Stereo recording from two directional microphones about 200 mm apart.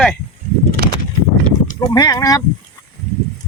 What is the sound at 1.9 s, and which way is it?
Speech, 15° left (ahead or behind).